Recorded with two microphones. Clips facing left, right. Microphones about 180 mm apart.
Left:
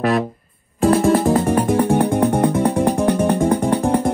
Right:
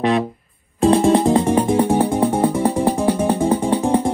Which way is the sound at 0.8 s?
25° right (ahead or behind).